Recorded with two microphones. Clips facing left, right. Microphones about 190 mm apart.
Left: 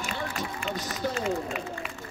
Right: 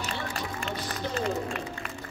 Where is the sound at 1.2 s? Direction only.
Centre (ahead or behind).